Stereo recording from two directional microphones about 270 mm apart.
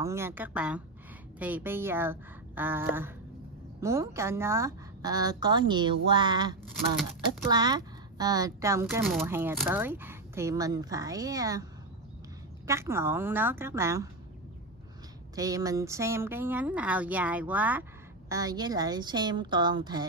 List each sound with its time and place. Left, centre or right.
0.0 s speech: centre
8.8 s speech: centre
12.6 s speech: centre
15.3 s speech: centre